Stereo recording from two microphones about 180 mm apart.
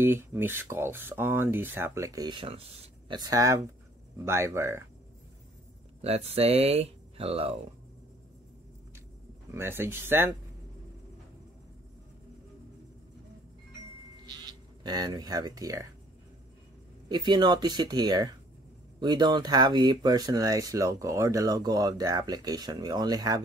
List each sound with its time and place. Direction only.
0.0 s speech: 10° right (ahead or behind); by 3.2 s 35° right (ahead or behind)
3.2 s speech: 20° right (ahead or behind)
6.0 s speech: 35° right (ahead or behind)
9.5 s speech: 15° right (ahead or behind)
14.2 s speech: 25° right (ahead or behind)
17.1 s speech: 25° right (ahead or behind)